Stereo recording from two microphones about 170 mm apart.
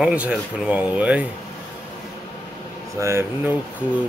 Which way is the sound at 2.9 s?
15° right (ahead or behind).